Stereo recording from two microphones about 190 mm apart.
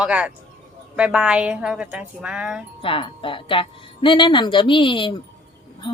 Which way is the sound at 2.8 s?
25° left (ahead or behind).